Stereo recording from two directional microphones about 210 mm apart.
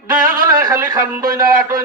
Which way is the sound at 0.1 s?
15° right (ahead or behind).